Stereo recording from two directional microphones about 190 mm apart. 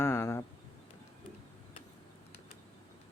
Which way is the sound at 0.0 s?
15° left (ahead or behind).